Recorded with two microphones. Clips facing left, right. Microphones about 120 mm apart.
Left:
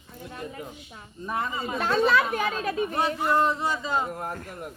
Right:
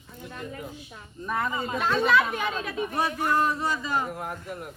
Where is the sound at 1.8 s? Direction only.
40° left (ahead or behind).